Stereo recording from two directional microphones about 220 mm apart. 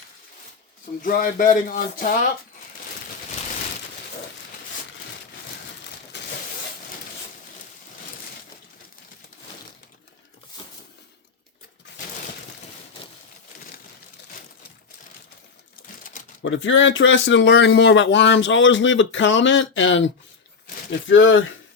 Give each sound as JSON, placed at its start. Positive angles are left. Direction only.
{"t": 1.0, "sound": "speech", "side_deg": 40}
{"t": 6.1, "sound": "crushing", "side_deg": 50}
{"t": 16.1, "sound": "shuffling cards", "side_deg": 35}
{"t": 16.4, "sound": "speech", "side_deg": 60}
{"t": 21.1, "sound": "speech", "side_deg": 60}